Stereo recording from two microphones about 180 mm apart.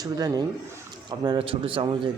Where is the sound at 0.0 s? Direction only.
20° right (ahead or behind).